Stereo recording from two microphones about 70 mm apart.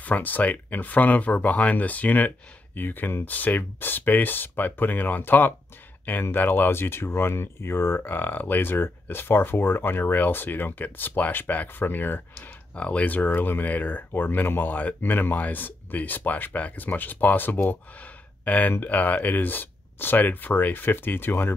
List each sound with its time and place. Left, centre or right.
0.0 s speech: left
12.7 s speech: centre